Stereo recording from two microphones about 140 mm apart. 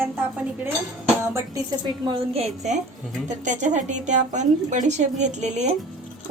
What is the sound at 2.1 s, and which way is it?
Speech, 45° right (ahead or behind).